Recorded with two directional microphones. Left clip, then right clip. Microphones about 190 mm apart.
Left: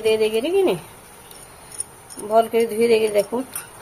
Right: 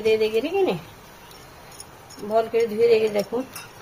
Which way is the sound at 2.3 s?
45° left (ahead or behind).